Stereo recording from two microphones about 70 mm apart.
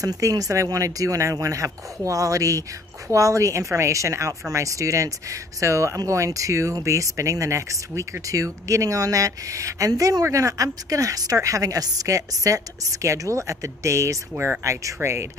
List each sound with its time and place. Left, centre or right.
0.0 s speech: right